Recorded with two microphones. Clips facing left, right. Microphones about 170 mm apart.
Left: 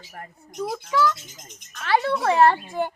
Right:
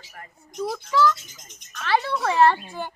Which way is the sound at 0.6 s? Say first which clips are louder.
Even; 15° left (ahead or behind).